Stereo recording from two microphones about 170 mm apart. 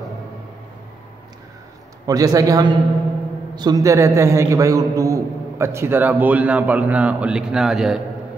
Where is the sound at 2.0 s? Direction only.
20° right (ahead or behind); by 8.0 s centre (ahead or behind).